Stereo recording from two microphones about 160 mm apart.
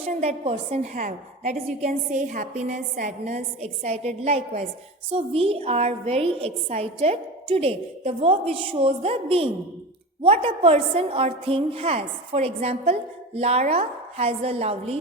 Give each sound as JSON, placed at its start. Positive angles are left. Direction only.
{"t": 0.0, "sound": "a woman's voice", "side_deg": -40}
{"t": 2.1, "sound": "a woman's voice", "side_deg": -50}